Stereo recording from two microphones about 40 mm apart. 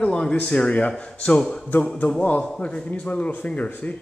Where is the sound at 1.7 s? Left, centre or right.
Left.